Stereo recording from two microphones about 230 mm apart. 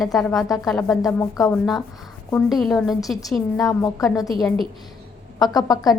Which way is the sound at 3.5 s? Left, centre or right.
Centre.